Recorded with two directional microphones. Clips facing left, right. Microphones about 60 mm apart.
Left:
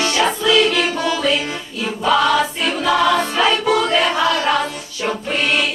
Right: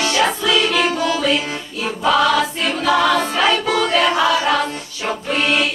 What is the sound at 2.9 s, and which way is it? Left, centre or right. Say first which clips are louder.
Choir: even; centre.